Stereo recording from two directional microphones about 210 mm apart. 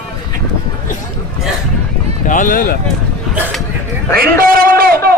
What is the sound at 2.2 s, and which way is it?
Speech, 40° left (ahead or behind).